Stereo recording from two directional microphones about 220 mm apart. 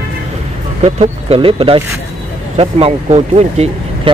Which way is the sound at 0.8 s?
30° right (ahead or behind).